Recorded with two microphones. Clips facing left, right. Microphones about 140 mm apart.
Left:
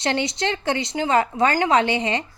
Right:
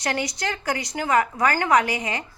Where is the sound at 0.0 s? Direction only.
25° left (ahead or behind).